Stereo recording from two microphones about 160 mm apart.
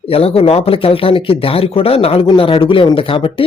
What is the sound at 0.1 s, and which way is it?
Speech, 35° left (ahead or behind).